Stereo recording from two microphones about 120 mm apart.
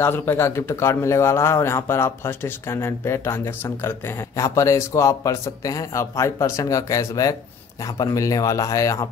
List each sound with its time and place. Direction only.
0.0 s speech: 15° left (ahead or behind)